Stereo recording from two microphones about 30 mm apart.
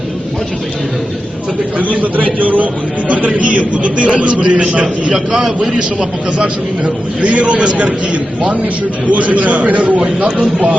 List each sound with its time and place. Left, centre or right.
1.8 s a man's voice: right
3.1 s a man's voice: right
9.0 s a man's voice: right